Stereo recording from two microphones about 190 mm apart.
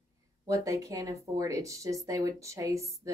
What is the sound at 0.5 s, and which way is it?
A woman's voice, 15° right (ahead or behind).